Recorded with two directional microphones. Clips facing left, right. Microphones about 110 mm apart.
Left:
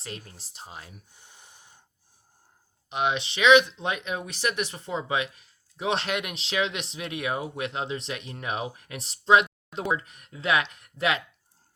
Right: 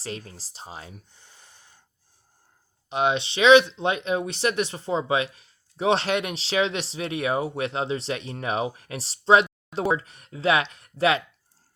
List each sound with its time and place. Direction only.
0.3 s speech: 35° right (ahead or behind)
1.1 s a sound: 15° left (ahead or behind)
2.9 s speech: 35° right (ahead or behind)